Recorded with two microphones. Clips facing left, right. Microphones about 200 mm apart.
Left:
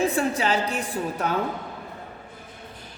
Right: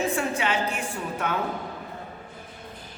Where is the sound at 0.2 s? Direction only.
35° left (ahead or behind).